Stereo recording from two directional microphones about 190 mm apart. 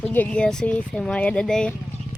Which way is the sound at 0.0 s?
10° left (ahead or behind).